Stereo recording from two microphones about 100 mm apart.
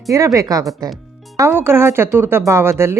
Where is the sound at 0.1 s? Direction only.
35° right (ahead or behind).